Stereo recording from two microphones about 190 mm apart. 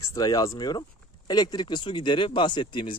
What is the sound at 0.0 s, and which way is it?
Speech, 20° left (ahead or behind).